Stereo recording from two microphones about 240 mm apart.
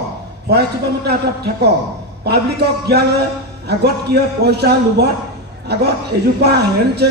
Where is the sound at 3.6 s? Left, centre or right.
Right.